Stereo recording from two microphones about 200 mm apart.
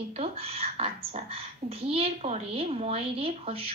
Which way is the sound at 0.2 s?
30° right (ahead or behind).